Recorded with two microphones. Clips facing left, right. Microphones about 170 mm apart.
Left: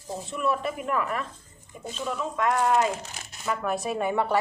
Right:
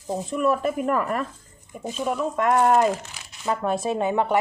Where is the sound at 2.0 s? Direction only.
55° right (ahead or behind).